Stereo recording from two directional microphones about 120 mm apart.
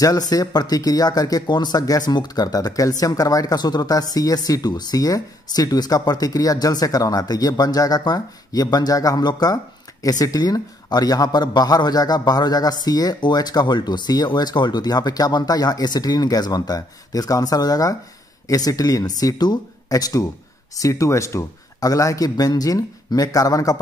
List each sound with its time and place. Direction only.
0.3 s speech: 35° left (ahead or behind)